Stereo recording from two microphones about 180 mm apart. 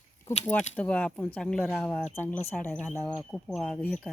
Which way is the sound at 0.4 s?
5° left (ahead or behind).